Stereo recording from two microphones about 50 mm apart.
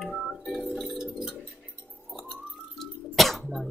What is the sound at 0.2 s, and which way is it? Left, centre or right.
Music, centre.